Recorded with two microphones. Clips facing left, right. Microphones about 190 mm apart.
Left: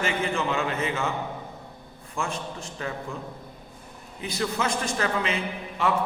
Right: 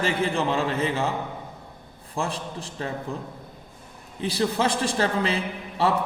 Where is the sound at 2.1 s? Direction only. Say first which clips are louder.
Right 2 dB; 35° right (ahead or behind).